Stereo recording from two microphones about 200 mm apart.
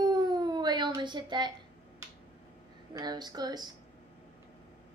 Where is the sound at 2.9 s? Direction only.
20° right (ahead or behind).